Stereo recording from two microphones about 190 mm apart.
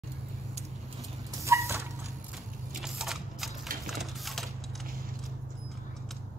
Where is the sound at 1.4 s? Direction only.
15° right (ahead or behind).